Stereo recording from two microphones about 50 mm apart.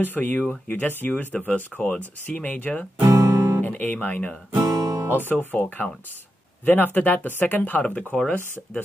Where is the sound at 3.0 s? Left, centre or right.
Right.